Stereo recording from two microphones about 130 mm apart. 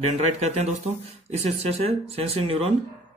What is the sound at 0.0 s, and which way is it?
Speech, 60° right (ahead or behind).